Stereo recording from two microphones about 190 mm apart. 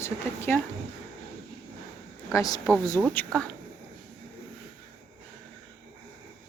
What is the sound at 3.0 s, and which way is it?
Speech, 5° left (ahead or behind).